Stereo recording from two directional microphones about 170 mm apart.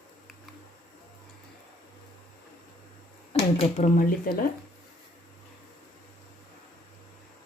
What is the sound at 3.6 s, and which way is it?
Speech, 45° left (ahead or behind).